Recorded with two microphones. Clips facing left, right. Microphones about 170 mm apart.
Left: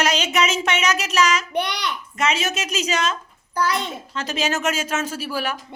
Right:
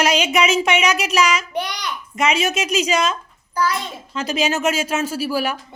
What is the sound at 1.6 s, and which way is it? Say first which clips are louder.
Speech: left 2 dB; 65° left (ahead or behind).